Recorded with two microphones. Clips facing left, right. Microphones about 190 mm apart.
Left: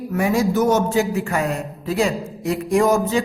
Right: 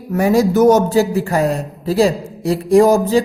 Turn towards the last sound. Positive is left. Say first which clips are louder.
# right 6 dB
turn(degrees=-35)  # may be behind; listen again after turning